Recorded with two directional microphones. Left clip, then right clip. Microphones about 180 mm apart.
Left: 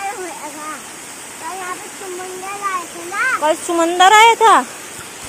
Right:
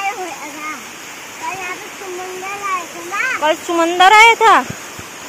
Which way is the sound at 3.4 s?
10° left (ahead or behind).